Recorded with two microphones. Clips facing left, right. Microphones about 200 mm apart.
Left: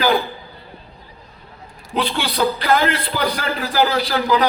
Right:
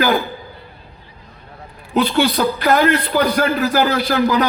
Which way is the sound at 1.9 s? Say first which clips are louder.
Right 6 dB; 45° right (ahead or behind).